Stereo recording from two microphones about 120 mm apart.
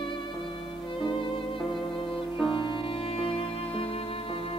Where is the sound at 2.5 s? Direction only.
45° left (ahead or behind).